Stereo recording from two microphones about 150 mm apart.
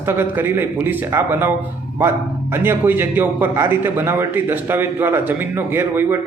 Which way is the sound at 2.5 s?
15° right (ahead or behind).